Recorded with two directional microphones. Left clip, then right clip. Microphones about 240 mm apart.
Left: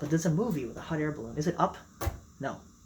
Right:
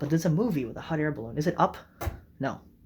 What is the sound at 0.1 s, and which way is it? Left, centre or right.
Speech, right.